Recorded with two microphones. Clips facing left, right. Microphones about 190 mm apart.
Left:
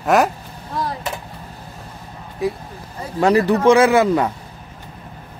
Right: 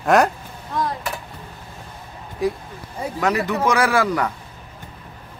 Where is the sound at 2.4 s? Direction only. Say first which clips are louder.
Even; centre (ahead or behind).